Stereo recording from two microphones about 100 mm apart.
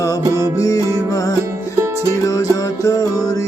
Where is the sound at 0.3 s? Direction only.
35° left (ahead or behind).